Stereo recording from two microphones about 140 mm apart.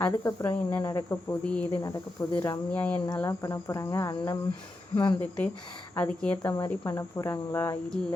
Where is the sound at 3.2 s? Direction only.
25° left (ahead or behind).